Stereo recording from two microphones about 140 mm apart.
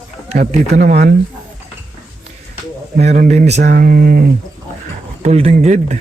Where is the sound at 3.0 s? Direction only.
55° right (ahead or behind); by 4.2 s 90° right.